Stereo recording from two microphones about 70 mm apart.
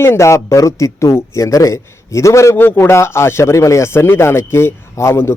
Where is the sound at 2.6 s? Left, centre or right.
Left.